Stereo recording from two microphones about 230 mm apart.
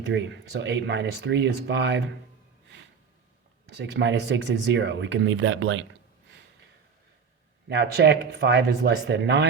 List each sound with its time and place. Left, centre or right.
0.1 s speech: right
3.7 s speech: right
7.7 s speech: right